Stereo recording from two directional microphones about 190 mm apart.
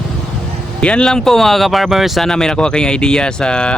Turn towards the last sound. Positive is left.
turn(degrees=5)  # may be behind; listen again after turning